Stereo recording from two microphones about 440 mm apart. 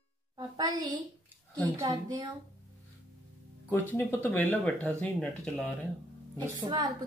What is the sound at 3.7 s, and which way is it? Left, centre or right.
Speech, centre.